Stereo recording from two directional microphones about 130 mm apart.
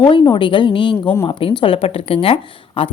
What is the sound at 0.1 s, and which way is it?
Speech, 40° left (ahead or behind).